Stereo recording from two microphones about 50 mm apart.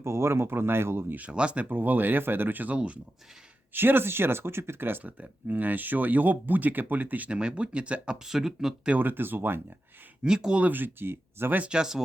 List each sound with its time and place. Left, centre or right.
0.0 s speech: right
1.3 s speech: right
1.7 s speech: right
2.7 s speech: right
3.8 s speech: right
7.3 s speech: centre
8.3 s speech: centre
9.0 s speech: right
10.2 s speech: centre
10.6 s speech: right
11.7 s speech: centre